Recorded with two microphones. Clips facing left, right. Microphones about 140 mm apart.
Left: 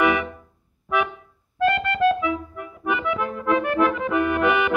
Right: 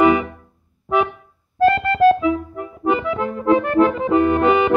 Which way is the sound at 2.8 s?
30° right (ahead or behind).